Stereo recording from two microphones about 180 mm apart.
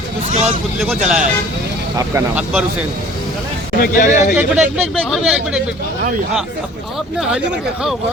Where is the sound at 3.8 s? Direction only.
50° left (ahead or behind).